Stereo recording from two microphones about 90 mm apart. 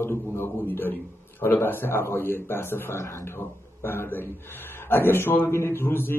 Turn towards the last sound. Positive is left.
turn(degrees=25)  # may be behind; listen again after turning